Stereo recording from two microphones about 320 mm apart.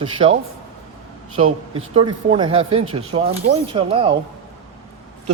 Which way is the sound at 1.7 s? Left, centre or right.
Centre.